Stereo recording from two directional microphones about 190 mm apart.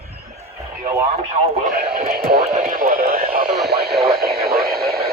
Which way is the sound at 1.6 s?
50° right (ahead or behind).